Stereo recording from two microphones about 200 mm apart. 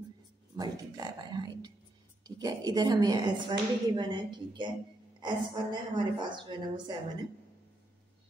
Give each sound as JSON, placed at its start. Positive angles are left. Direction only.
{"t": 0.6, "sound": "speech", "side_deg": -20}